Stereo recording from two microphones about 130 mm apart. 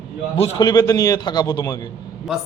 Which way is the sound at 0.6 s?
30° left (ahead or behind).